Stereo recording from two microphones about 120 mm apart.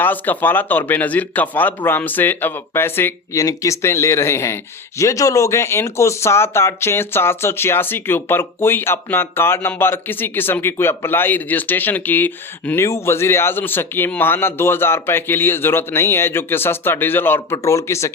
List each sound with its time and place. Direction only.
0.0 s speech: 15° left (ahead or behind)